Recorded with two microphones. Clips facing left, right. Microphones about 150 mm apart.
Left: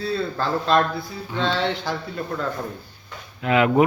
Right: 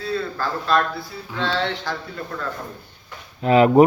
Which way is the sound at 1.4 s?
15° left (ahead or behind).